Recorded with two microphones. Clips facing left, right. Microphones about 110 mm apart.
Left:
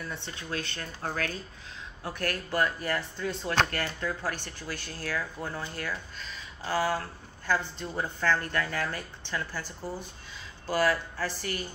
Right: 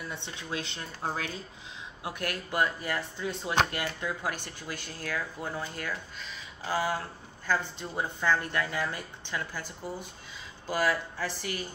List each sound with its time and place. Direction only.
0.1 s speech: 20° right (ahead or behind)
5.0 s speech: 5° right (ahead or behind)
10.8 s speech: 5° right (ahead or behind)